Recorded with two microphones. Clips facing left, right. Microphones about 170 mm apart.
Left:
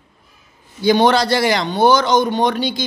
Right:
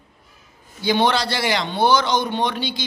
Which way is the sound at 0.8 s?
45° left (ahead or behind).